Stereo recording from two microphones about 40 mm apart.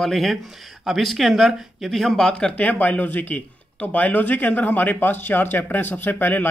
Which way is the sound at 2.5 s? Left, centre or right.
Left.